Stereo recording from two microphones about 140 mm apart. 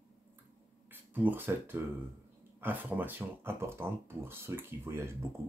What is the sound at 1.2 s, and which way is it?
Speech, 15° right (ahead or behind).